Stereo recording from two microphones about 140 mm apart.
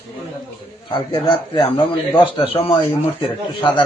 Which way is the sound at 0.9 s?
30° left (ahead or behind).